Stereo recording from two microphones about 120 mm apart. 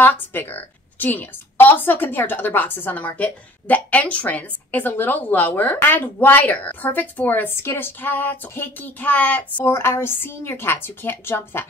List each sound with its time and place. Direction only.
0.0 s a woman's voice: 15° left (ahead or behind)